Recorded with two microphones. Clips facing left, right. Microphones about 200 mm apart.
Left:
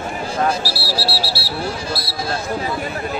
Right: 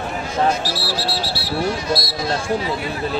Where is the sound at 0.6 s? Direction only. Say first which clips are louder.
Even; 10° left (ahead or behind).